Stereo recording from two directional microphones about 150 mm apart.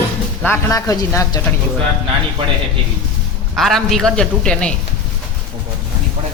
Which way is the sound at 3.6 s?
Centre (ahead or behind).